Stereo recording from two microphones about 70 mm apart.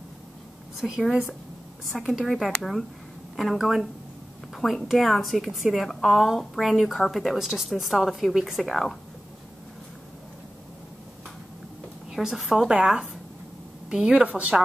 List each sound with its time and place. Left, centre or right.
0.7 s a woman's voice: centre
12.1 s a woman's voice: centre